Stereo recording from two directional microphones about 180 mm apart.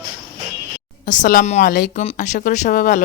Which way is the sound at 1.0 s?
45° left (ahead or behind).